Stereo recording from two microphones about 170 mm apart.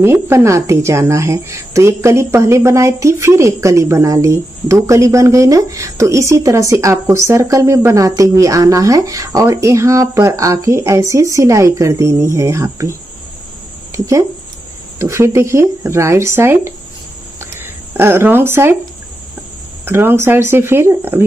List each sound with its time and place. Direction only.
0.0 s a woman's voice: 15° right (ahead or behind)
13.9 s a woman's voice: 20° right (ahead or behind)
17.4 s a sound: 15° right (ahead or behind)
19.8 s a woman's voice: 15° right (ahead or behind)